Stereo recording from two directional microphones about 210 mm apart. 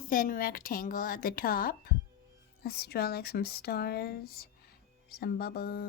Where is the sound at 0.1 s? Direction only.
40° left (ahead or behind).